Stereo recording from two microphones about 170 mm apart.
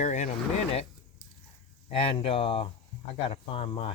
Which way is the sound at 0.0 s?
45° left (ahead or behind).